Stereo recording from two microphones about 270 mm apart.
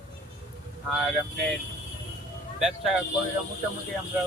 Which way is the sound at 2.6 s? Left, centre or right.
Centre.